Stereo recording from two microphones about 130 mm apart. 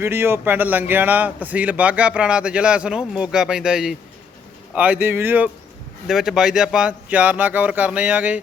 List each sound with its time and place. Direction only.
0.0 s speech: 20° right (ahead or behind)
6.1 s speech: 5° right (ahead or behind)